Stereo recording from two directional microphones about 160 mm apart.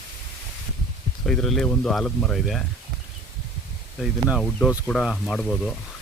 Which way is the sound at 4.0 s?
Centre (ahead or behind).